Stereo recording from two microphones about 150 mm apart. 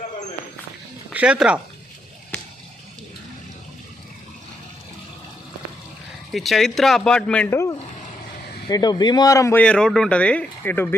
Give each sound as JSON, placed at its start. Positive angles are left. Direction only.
{"t": 1.1, "sound": "speech", "side_deg": -5}
{"t": 6.3, "sound": "speech", "side_deg": 0}
{"t": 7.5, "sound": "speech", "side_deg": 20}
{"t": 9.6, "sound": "speech", "side_deg": 5}